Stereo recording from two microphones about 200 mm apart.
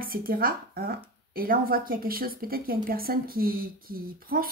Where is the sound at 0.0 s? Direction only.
45° right (ahead or behind).